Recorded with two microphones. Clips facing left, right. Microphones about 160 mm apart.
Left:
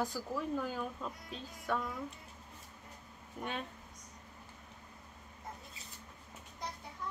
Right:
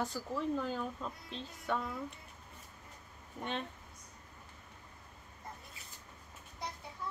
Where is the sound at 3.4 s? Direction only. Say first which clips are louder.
Right 1 dB; 5° left (ahead or behind).